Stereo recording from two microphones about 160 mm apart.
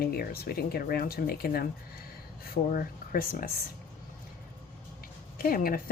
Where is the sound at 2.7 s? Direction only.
60° left (ahead or behind).